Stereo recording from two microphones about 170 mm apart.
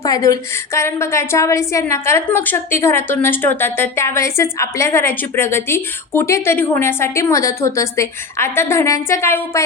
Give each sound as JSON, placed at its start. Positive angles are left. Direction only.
{"t": 0.0, "sound": "a woman's voice", "side_deg": 20}